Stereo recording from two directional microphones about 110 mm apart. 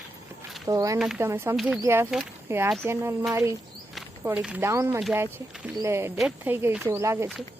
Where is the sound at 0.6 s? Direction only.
30° right (ahead or behind).